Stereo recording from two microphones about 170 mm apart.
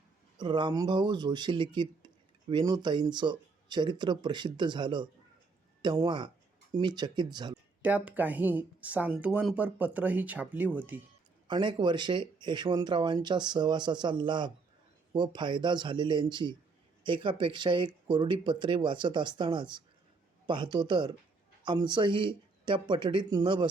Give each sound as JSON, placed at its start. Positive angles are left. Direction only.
{"t": 0.3, "sound": "speech", "side_deg": -25}
{"t": 7.8, "sound": "speech", "side_deg": -10}
{"t": 11.4, "sound": "speech", "side_deg": -25}